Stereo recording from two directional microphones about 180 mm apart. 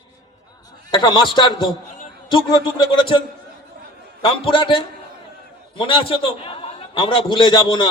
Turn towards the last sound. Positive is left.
turn(degrees=25)  # may be behind; listen again after turning